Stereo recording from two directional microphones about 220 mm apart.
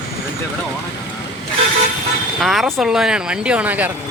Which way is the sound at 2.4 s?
Centre (ahead or behind).